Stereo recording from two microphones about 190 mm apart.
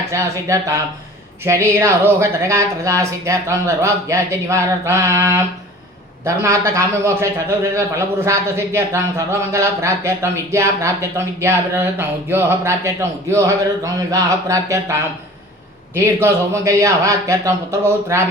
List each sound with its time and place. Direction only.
0.1 s a man's voice: 15° right (ahead or behind)
16.0 s a man's voice: 15° right (ahead or behind)